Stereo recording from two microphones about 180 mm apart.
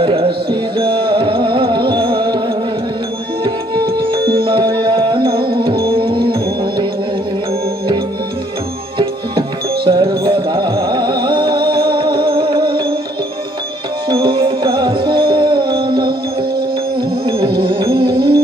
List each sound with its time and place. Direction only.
0.0 s music: 30° right (ahead or behind)
3.9 s music: 25° right (ahead or behind)
9.8 s music: 25° right (ahead or behind)
14.0 s music: 25° right (ahead or behind)
15.7 s music: 60° right (ahead or behind)
17.6 s music: 30° right (ahead or behind)